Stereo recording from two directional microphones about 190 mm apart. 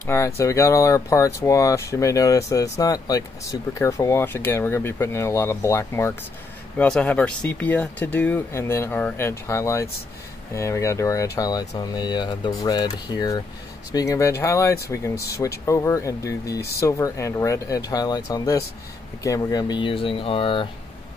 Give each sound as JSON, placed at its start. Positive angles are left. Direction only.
{"t": 0.0, "sound": "speech", "side_deg": 15}